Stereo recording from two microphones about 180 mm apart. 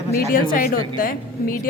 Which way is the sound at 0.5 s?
50° left (ahead or behind).